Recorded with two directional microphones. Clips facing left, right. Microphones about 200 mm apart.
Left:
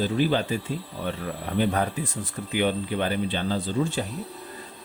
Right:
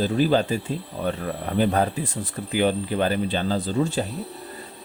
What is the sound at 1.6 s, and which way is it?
Speech, 40° right (ahead or behind).